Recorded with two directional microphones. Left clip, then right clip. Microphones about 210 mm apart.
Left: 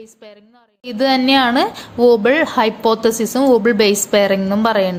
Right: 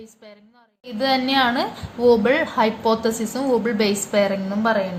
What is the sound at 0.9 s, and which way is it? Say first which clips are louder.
A woman's voice: left 6 dB; 35° left (ahead or behind).